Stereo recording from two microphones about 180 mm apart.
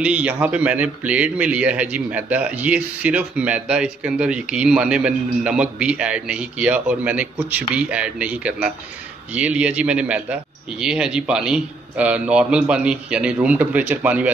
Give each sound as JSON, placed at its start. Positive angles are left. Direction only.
{"t": 0.0, "sound": "a man's voice", "side_deg": -10}